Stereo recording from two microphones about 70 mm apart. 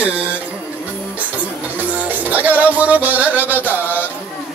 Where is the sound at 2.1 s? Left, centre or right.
Right.